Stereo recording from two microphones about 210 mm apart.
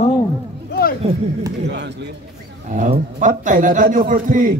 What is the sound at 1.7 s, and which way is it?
Speech, 55° right (ahead or behind).